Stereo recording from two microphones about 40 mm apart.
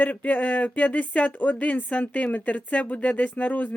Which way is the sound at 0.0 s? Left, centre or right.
Left.